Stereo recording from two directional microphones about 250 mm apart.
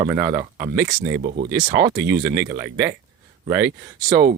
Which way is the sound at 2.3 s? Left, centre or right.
Centre.